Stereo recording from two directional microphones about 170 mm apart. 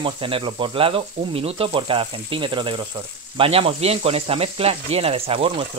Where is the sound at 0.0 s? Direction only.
30° right (ahead or behind).